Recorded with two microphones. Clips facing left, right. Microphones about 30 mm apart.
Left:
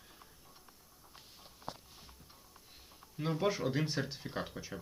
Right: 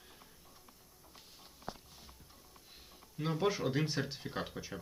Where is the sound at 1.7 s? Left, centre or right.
Centre.